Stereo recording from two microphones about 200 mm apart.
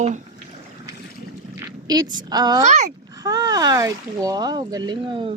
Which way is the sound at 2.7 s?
35° right (ahead or behind).